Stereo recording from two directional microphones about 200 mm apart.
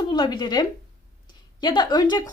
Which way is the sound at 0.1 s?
20° left (ahead or behind).